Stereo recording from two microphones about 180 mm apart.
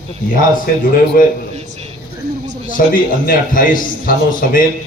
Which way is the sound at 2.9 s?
50° left (ahead or behind).